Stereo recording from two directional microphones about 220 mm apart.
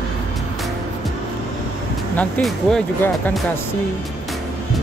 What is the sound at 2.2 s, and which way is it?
Speech, centre (ahead or behind).